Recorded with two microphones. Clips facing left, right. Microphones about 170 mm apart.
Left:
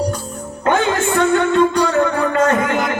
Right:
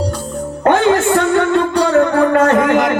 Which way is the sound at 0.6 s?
60° right (ahead or behind).